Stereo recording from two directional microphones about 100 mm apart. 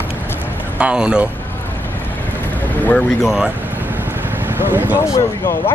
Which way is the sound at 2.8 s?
15° left (ahead or behind).